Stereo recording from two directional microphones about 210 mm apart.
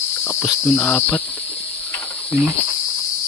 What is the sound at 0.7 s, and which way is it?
Cricket, 5° left (ahead or behind).